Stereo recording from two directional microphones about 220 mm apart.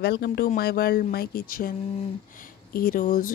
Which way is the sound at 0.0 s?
50° left (ahead or behind).